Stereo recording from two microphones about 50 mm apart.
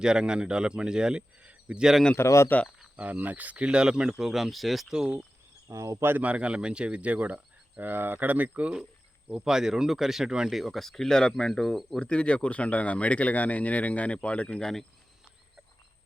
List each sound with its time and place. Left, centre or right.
0.0 s speech: centre
2.1 s speech: left
2.9 s speech: right; by 4.9 s centre
4.9 s speech: centre
5.7 s speech: right
6.2 s speech: right
7.9 s speech: right
9.4 s speech: centre
11.9 s speech: left
14.6 s speech: centre